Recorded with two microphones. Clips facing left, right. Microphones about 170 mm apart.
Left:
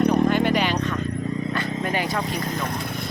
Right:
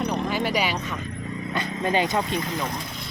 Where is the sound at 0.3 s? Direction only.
5° right (ahead or behind).